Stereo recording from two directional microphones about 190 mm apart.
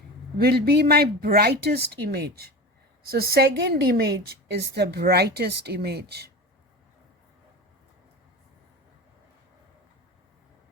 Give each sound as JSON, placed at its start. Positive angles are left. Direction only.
{"t": 0.3, "sound": "a woman's voice", "side_deg": -55}